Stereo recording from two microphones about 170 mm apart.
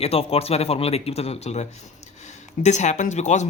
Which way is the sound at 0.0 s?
35° left (ahead or behind).